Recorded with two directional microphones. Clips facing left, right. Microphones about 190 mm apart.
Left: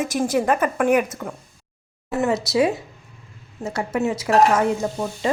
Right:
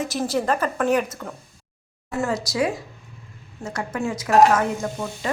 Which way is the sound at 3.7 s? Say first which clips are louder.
Left 4 dB; 25° left (ahead or behind).